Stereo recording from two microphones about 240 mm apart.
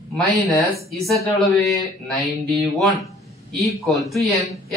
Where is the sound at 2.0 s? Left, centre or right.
Centre.